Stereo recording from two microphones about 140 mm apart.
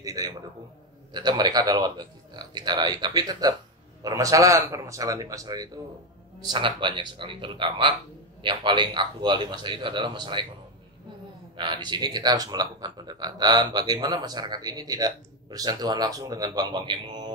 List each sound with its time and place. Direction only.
0.0 s speech: 25° right (ahead or behind)
11.5 s speech: 35° right (ahead or behind)